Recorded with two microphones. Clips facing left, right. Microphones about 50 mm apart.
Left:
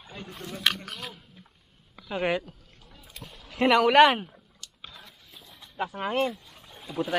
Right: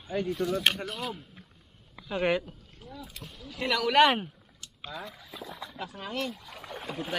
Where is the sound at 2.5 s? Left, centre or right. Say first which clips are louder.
Right 5 dB; centre.